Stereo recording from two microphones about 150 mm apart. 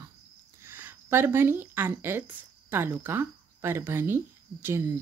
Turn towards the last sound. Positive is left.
turn(degrees=-15)  # may be behind; listen again after turning